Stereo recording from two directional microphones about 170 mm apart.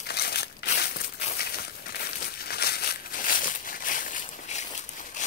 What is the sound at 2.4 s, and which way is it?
Crumpling, 70° left (ahead or behind).